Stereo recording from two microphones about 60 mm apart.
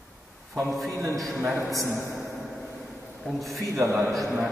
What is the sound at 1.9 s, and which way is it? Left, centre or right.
Speech, left.